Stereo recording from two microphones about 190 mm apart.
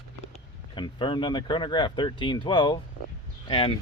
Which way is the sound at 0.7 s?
25° left (ahead or behind).